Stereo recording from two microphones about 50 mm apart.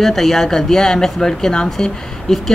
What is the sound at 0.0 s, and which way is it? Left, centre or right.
Speech, centre.